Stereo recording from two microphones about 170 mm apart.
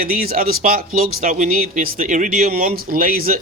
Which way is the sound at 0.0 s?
60° right (ahead or behind).